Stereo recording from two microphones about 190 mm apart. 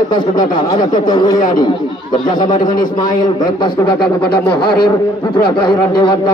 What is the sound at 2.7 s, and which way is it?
Speech, 45° left (ahead or behind).